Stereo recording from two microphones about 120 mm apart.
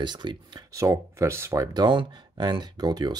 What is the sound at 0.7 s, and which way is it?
Speech, 25° right (ahead or behind).